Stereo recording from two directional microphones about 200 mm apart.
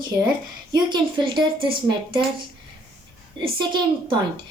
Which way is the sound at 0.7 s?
20° right (ahead or behind).